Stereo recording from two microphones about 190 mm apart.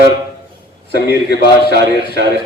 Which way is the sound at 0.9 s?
55° left (ahead or behind).